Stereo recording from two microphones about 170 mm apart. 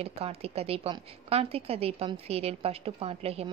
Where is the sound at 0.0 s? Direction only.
35° right (ahead or behind).